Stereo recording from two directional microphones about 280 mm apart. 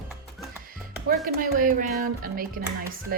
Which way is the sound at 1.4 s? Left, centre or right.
Right.